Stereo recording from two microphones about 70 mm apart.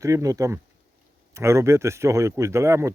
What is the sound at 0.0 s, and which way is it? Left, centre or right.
Speech, right.